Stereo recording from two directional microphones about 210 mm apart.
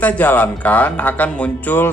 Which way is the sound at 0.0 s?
5° left (ahead or behind).